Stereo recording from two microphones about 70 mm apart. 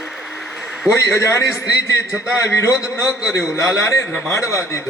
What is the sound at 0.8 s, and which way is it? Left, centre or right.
A man's voice, left.